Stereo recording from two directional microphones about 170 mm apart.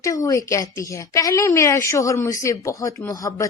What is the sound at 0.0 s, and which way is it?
A woman's voice, 20° left (ahead or behind).